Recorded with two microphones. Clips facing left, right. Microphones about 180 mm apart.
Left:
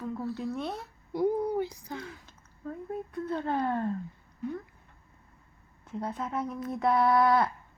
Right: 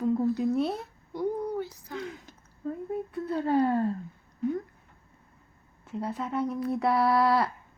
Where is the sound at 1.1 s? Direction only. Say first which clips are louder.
Left 3 dB; 10° left (ahead or behind).